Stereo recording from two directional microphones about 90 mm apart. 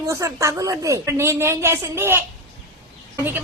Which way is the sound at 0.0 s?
35° right (ahead or behind).